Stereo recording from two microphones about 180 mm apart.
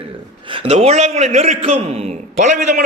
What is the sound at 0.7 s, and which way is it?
A man's voice, 35° right (ahead or behind).